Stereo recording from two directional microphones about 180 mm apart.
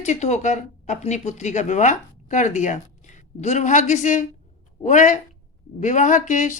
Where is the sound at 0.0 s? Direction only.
40° left (ahead or behind).